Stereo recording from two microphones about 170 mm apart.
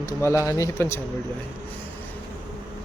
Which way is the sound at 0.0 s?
15° left (ahead or behind).